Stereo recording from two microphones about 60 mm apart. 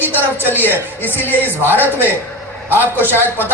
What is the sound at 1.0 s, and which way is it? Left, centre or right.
Speech, left.